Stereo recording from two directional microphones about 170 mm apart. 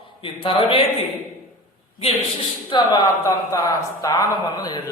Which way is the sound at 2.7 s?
25° left (ahead or behind).